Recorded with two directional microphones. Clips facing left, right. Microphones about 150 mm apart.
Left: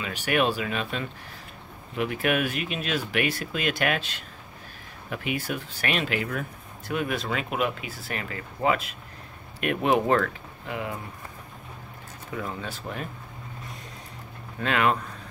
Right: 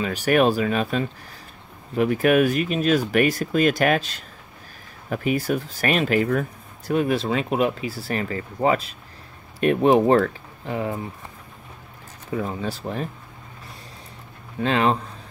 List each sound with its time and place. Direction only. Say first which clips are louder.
0.0 s speech: right 6 dB; 40° right (ahead or behind)
12.4 s speech: right 6 dB; 35° right (ahead or behind)
14.6 s speech: right 4 dB; 30° right (ahead or behind)